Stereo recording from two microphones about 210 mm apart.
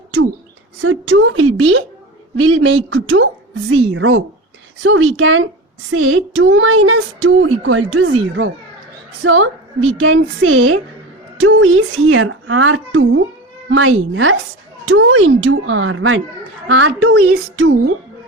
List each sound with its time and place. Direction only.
0.8 s speech: 70° right (ahead or behind)
9.2 s speech: 70° right (ahead or behind)